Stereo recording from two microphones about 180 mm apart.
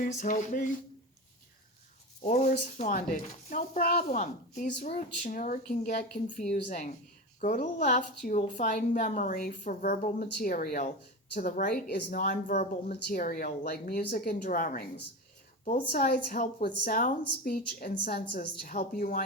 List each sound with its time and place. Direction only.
0.0 s speech: 45° left (ahead or behind)
2.2 s a woman's voice: 40° left (ahead or behind)